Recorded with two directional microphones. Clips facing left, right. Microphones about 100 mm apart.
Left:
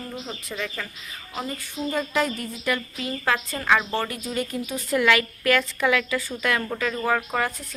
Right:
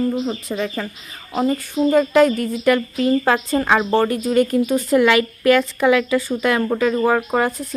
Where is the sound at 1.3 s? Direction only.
45° right (ahead or behind).